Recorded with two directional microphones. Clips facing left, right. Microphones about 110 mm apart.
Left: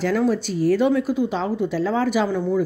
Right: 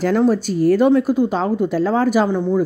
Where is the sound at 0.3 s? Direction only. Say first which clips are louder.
Right 4 dB; 45° right (ahead or behind).